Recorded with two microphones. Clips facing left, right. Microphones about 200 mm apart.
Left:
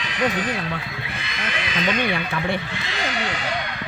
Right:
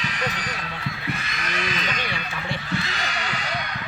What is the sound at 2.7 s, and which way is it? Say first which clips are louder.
Speech: right 4 dB; 40° right (ahead or behind).